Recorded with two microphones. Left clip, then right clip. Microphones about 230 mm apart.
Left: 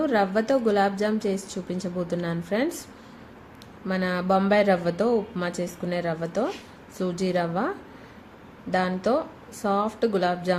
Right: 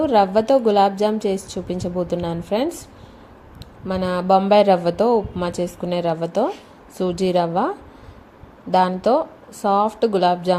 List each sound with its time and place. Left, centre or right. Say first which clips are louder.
0.0 s a woman's voice: right 7 dB; centre
3.8 s a woman's voice: right 6 dB; centre
8.7 s a woman's voice: right 7 dB; centre